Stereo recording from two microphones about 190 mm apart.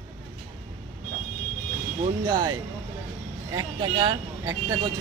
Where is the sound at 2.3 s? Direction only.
20° right (ahead or behind).